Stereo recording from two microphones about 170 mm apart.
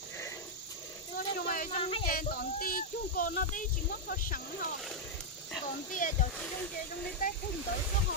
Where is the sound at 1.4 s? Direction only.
55° left (ahead or behind).